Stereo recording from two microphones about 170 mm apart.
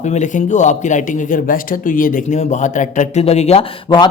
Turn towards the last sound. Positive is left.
turn(degrees=30)  # may be behind; listen again after turning